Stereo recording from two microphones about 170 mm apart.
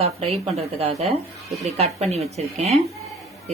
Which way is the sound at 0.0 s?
35° right (ahead or behind).